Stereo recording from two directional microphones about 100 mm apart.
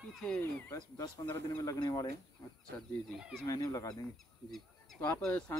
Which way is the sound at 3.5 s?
35° left (ahead or behind).